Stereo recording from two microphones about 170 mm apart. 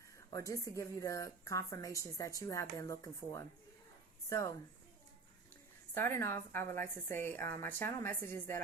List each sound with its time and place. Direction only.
0.3 s a woman's voice: 20° left (ahead or behind)
5.9 s a woman's voice: 15° left (ahead or behind)